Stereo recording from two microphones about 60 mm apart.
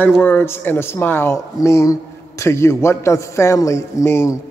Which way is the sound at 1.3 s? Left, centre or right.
Left.